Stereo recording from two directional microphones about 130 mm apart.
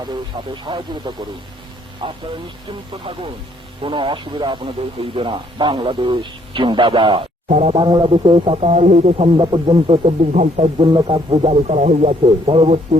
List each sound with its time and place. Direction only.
0.0 s a man's voice: 35° right (ahead or behind)
7.4 s speech: 60° right (ahead or behind)
7.8 s a man's voice: 35° right (ahead or behind)
8.7 s a man's voice: 60° right (ahead or behind)
9.4 s a man's voice: 35° right (ahead or behind)
10.8 s speech: 35° right (ahead or behind); by 13.0 s 50° right (ahead or behind)